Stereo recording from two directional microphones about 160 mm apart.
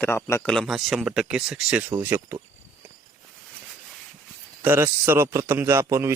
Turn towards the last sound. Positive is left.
turn(degrees=-15)  # may be behind; listen again after turning